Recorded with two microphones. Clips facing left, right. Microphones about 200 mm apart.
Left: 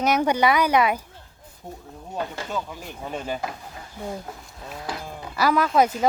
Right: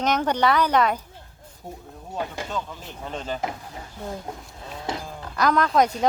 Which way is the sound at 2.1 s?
15° right (ahead or behind).